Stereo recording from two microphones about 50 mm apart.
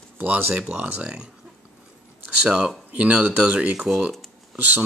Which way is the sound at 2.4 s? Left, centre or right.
Centre.